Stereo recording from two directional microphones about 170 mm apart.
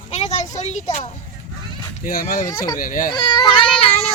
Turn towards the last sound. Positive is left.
turn(degrees=30)  # may be behind; listen again after turning